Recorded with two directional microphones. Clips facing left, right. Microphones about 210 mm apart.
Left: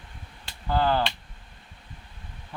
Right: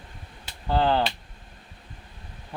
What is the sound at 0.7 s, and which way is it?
Speech, 25° right (ahead or behind).